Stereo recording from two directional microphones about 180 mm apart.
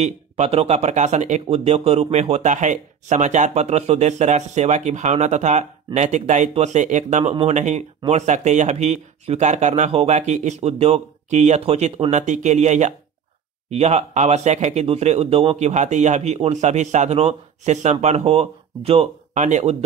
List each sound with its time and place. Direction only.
0.0 s speech: 35° right (ahead or behind)